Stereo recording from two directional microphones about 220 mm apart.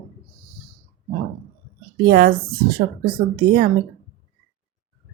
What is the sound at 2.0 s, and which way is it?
Speech, 45° right (ahead or behind).